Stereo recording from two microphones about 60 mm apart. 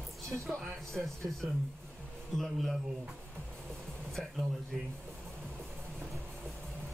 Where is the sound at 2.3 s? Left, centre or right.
Centre.